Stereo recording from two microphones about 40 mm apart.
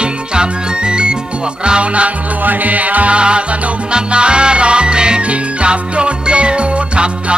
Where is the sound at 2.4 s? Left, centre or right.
Right.